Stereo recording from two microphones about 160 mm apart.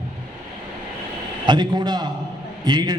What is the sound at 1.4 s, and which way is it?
A man's voice, 30° right (ahead or behind).